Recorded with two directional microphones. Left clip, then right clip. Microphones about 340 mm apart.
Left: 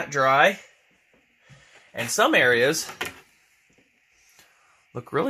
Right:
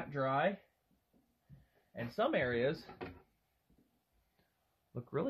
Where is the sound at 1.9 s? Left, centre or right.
Left.